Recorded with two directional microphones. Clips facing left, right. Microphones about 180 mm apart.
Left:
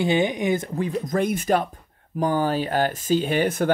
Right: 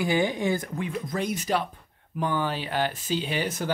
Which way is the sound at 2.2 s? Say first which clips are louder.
Left 6 dB; 40° left (ahead or behind).